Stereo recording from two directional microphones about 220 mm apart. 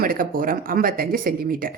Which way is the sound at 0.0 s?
40° right (ahead or behind).